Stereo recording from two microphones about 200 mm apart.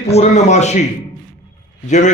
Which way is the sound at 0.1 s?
35° left (ahead or behind).